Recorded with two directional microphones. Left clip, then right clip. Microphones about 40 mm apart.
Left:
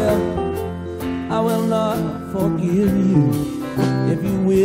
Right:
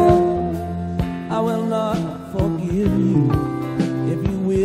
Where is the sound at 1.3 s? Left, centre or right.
Centre.